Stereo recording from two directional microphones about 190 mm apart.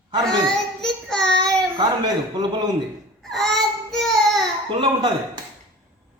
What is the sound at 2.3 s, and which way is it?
Speech, 20° right (ahead or behind).